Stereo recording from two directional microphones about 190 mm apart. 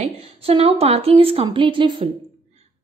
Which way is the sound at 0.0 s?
30° right (ahead or behind).